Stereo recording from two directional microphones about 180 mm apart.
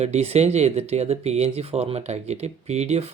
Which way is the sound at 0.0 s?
35° right (ahead or behind).